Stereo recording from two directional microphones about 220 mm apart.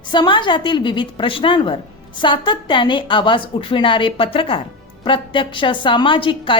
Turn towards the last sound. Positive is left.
turn(degrees=20)  # may be behind; listen again after turning